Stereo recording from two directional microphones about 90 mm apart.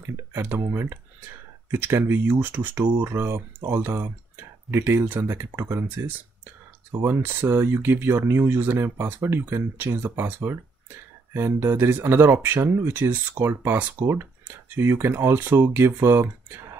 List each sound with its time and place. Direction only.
0.3 s speech: 25° right (ahead or behind)